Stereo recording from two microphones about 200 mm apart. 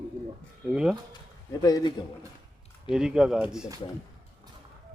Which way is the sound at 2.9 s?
5° right (ahead or behind).